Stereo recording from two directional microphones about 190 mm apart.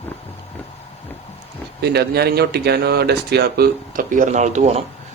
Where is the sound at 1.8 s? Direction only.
60° right (ahead or behind).